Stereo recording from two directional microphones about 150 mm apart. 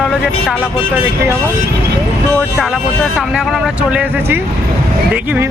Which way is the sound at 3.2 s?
5° right (ahead or behind).